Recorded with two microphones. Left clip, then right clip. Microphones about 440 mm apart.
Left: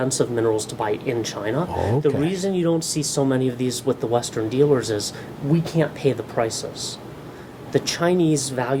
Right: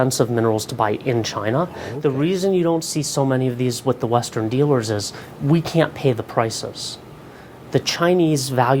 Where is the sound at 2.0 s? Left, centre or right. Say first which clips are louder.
Right 2 dB; right.